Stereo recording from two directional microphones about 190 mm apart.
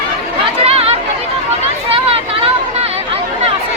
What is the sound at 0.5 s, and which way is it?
Chatter, 30° right (ahead or behind).